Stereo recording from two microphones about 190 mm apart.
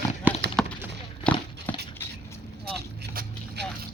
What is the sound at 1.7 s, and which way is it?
Patter, 10° left (ahead or behind).